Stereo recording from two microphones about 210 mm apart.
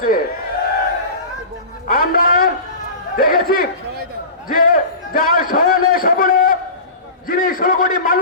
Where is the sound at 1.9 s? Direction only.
40° left (ahead or behind).